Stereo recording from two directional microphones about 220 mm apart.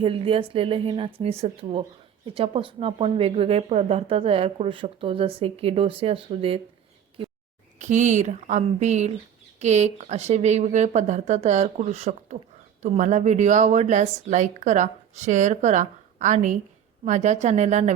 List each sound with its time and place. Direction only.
0.0 s speech: 25° right (ahead or behind)
7.8 s speech: 35° right (ahead or behind)